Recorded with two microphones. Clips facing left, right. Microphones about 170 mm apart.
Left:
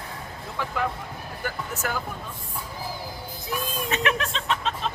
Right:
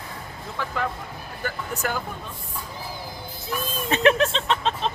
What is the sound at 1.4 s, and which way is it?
Speech, 10° left (ahead or behind).